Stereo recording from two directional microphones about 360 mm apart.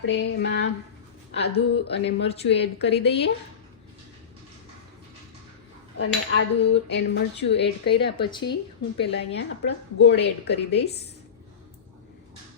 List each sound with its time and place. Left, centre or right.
0.1 s a woman's voice: left
6.0 s a woman's voice: left
8.2 s speech: centre
9.0 s a woman's voice: left